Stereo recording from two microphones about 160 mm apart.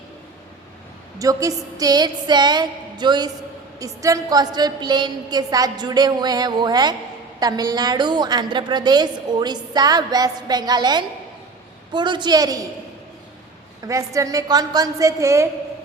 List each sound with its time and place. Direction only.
1.2 s a woman's voice: 20° right (ahead or behind)
13.8 s a woman's voice: 20° right (ahead or behind)